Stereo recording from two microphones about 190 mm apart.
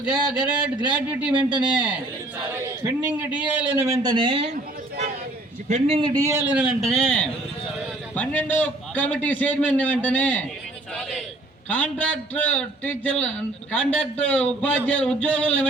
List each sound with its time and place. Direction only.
0.0 s a man's voice: 5° right (ahead or behind)
2.8 s a man's voice: 5° right (ahead or behind); by 4.5 s 30° right (ahead or behind)
5.6 s a man's voice: 35° right (ahead or behind)
6.1 s a man's voice: 15° right (ahead or behind); by 10.4 s 5° left (ahead or behind)
11.7 s a man's voice: 5° left (ahead or behind)